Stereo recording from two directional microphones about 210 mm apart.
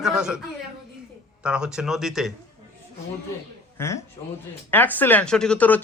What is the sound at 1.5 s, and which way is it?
Speech, 5° right (ahead or behind).